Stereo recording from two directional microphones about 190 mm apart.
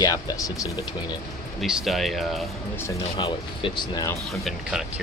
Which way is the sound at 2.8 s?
25° left (ahead or behind).